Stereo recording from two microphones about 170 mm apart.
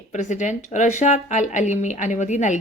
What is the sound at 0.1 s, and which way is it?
Speech, 45° left (ahead or behind).